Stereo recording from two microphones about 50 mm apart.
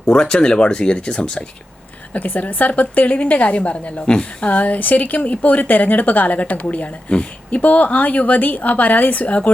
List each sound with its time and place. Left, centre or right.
0.0 s speech: centre
2.1 s speech: left